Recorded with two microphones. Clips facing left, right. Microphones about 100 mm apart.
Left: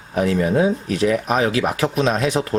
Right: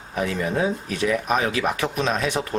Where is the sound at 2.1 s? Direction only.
Centre (ahead or behind).